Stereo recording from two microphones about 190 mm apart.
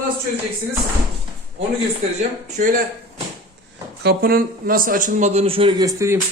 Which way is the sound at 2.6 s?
40° right (ahead or behind).